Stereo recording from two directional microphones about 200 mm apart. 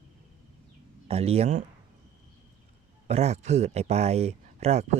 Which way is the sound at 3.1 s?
35° right (ahead or behind).